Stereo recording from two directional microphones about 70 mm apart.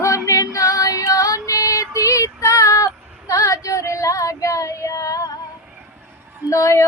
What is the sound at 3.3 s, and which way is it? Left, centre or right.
Child singing, left.